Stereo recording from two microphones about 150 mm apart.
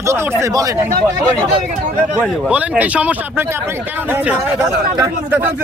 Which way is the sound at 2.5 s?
10° right (ahead or behind).